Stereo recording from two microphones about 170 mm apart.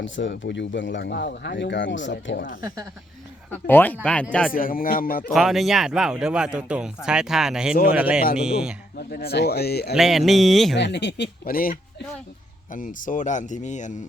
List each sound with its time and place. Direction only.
0.0 s speech: 90° left
2.6 s speech: 20° right (ahead or behind)
3.7 s speech: 10° left (ahead or behind)
4.5 s speech: 55° left (ahead or behind)
5.3 s speech: centre (ahead or behind)
9.0 s speech: 65° left (ahead or behind)
9.9 s speech: centre (ahead or behind)
10.8 s speech: 90° left; by 13.9 s 45° left (ahead or behind)